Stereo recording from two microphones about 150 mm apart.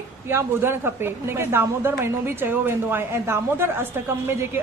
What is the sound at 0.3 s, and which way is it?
A woman's voice, 15° right (ahead or behind).